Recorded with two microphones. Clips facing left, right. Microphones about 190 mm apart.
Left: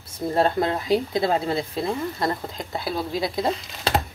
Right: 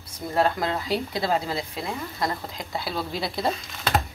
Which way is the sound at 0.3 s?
30° left (ahead or behind).